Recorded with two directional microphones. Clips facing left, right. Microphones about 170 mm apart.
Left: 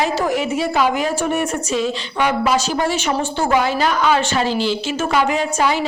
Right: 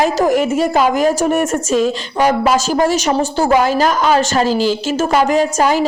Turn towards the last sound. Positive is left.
turn(degrees=-40)  # may be behind; listen again after turning